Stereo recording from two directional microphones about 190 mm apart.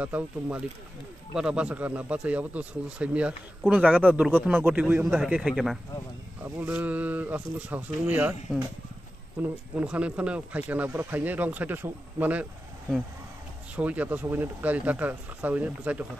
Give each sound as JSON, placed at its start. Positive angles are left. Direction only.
{"t": 0.0, "sound": "a man's voice", "side_deg": -5}
{"t": 4.5, "sound": "a man's voice", "side_deg": -10}
{"t": 9.4, "sound": "speech", "side_deg": -5}
{"t": 13.7, "sound": "speech", "side_deg": -10}